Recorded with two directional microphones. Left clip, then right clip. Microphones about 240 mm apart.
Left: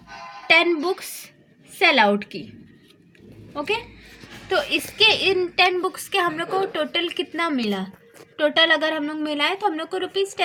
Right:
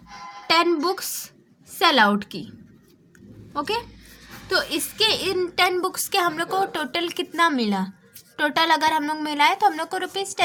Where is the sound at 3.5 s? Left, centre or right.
Right.